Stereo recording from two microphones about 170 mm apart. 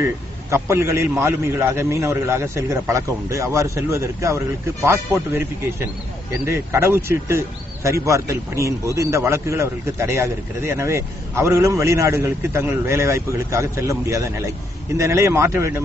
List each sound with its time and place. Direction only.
0.0 s speech: 15° right (ahead or behind)